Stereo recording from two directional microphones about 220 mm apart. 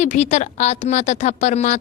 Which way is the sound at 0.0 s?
30° left (ahead or behind).